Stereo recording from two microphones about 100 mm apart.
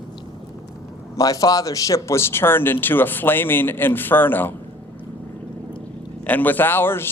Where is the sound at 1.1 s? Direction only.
35° left (ahead or behind); by 4.5 s 20° left (ahead or behind).